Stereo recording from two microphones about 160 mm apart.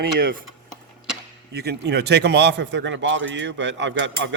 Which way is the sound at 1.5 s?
90° right.